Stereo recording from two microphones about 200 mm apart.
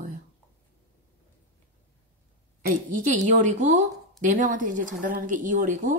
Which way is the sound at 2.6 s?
40° right (ahead or behind).